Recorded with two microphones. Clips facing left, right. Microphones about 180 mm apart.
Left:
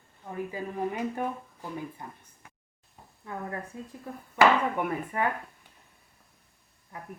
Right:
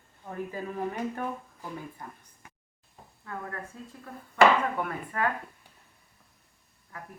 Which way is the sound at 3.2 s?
15° left (ahead or behind).